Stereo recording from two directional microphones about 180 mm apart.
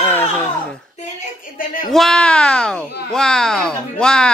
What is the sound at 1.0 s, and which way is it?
Speech, 45° left (ahead or behind).